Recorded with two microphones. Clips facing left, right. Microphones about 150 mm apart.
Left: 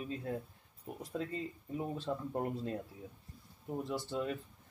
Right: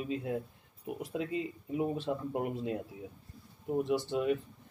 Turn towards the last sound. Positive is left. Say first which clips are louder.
# right 7 dB
turn(degrees=-15)  # may be behind; listen again after turning